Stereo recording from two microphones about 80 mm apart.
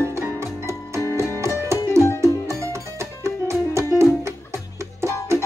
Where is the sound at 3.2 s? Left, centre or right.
Right.